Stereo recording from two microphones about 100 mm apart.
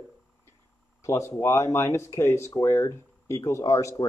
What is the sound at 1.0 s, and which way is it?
Speech, 25° left (ahead or behind).